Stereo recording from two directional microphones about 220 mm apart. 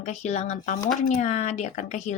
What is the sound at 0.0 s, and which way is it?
A woman's voice, 30° left (ahead or behind).